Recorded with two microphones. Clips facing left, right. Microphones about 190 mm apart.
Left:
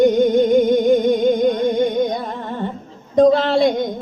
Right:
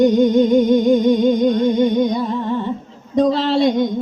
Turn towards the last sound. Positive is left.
turn(degrees=50)  # may be behind; listen again after turning